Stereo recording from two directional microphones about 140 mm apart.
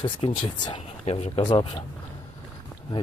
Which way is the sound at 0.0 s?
35° left (ahead or behind).